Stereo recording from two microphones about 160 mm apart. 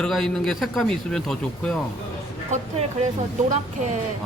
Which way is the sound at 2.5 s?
45° right (ahead or behind).